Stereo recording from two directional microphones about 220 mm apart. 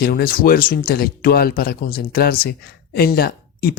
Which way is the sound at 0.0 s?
45° left (ahead or behind).